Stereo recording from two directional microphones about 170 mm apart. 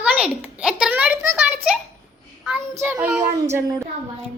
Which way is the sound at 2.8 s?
10° right (ahead or behind).